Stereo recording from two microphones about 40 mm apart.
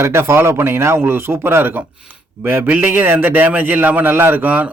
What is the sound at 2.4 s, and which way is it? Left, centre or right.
Speech, right.